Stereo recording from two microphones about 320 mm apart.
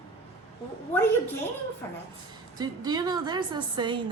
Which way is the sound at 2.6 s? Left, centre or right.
Centre.